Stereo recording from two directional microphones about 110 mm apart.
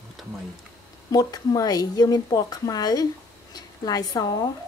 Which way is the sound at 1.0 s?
35° left (ahead or behind).